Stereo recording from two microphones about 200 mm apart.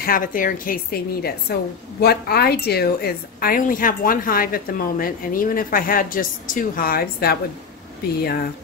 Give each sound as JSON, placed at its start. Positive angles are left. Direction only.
{"t": 0.0, "sound": "a woman's voice", "side_deg": 45}